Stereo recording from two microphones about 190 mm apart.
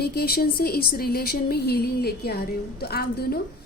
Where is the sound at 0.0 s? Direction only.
55° left (ahead or behind).